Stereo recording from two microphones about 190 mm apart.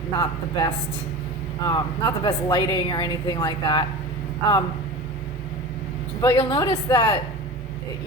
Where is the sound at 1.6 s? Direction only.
25° left (ahead or behind).